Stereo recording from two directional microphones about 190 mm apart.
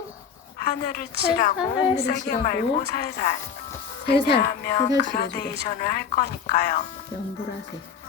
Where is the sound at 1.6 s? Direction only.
30° left (ahead or behind); by 6.7 s 55° left (ahead or behind).